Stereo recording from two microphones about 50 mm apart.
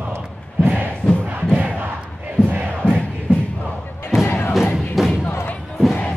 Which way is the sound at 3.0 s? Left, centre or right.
Centre.